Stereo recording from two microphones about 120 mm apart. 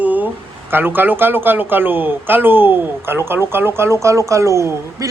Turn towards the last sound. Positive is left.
turn(degrees=-25)  # may be behind; listen again after turning